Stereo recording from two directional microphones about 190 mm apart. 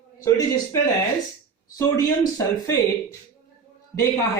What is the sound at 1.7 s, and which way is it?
Speech, 15° left (ahead or behind).